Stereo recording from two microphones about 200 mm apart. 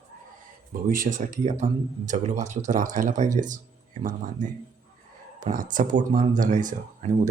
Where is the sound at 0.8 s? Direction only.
45° right (ahead or behind).